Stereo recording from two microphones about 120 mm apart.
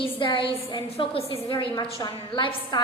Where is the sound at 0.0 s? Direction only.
45° left (ahead or behind).